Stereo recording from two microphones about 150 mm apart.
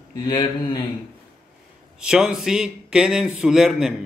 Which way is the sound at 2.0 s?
5° right (ahead or behind).